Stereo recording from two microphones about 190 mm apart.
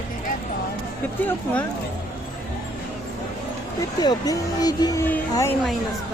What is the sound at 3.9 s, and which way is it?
A woman's voice, 20° left (ahead or behind).